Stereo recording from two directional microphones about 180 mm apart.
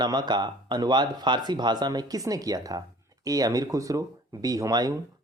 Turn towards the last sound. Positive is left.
turn(degrees=-20)  # may be behind; listen again after turning